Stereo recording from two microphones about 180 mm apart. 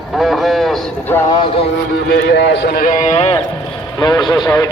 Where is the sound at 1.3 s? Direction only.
25° left (ahead or behind).